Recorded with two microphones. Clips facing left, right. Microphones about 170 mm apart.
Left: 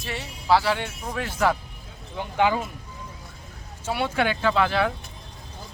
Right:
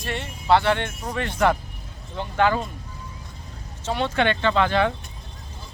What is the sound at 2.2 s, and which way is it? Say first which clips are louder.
Speech: right 1 dB; 15° left (ahead or behind).